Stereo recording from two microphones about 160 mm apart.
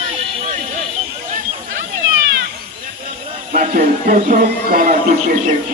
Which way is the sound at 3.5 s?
60° right (ahead or behind).